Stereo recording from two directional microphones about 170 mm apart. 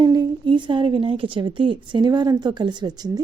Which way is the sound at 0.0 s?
25° right (ahead or behind).